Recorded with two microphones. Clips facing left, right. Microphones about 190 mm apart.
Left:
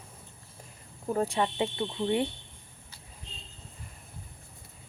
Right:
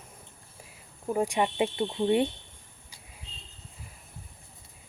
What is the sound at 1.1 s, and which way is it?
Speech, 15° right (ahead or behind).